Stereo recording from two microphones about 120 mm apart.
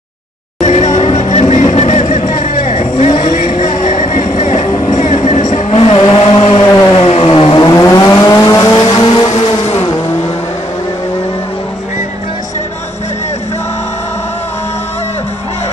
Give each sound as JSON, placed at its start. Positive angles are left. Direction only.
{"t": 0.6, "sound": "music", "side_deg": 65}
{"t": 3.2, "sound": "vehicle", "side_deg": 90}
{"t": 6.6, "sound": "siren", "side_deg": 25}
{"t": 6.9, "sound": "vehicle", "side_deg": 50}
{"t": 8.8, "sound": "vehicle", "side_deg": 45}
{"t": 9.3, "sound": "vehicle", "side_deg": 55}